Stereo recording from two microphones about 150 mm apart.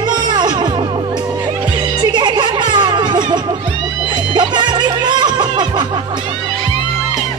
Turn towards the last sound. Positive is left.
turn(degrees=-30)  # may be behind; listen again after turning